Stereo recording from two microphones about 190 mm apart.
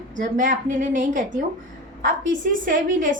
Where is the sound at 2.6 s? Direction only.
45° right (ahead or behind).